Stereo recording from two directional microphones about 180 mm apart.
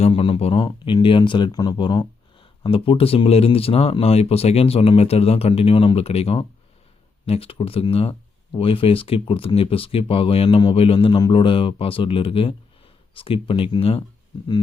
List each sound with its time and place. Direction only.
0.0 s speech: 30° left (ahead or behind)